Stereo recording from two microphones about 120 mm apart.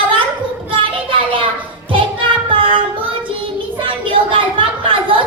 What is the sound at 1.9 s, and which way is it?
Music, 45° right (ahead or behind).